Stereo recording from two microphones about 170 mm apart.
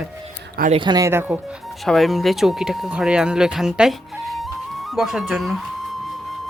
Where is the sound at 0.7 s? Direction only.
25° right (ahead or behind).